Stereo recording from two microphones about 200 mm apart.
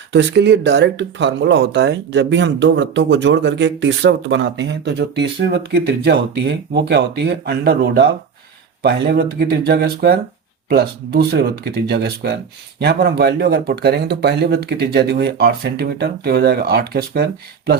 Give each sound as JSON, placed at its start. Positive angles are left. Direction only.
{"t": 0.1, "sound": "speech", "side_deg": -60}